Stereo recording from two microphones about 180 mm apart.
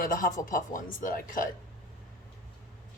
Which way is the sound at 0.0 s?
50° left (ahead or behind).